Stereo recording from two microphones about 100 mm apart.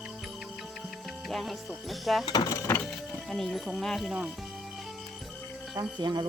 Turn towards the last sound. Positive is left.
turn(degrees=-45)  # may be behind; listen again after turning